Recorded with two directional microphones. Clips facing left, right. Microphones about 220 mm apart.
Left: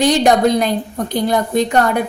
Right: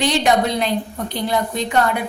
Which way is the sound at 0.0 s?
45° left (ahead or behind).